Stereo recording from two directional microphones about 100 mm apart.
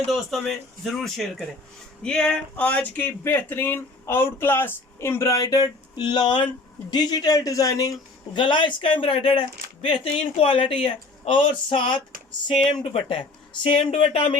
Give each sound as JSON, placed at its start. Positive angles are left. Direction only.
{"t": 0.1, "sound": "speech", "side_deg": 0}
{"t": 5.4, "sound": "speech", "side_deg": 40}
{"t": 8.4, "sound": "a man's voice", "side_deg": 55}
{"t": 11.7, "sound": "a man's voice", "side_deg": 55}
{"t": 14.1, "sound": "speech", "side_deg": 90}